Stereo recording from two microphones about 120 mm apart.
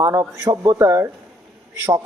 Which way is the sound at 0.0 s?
25° right (ahead or behind).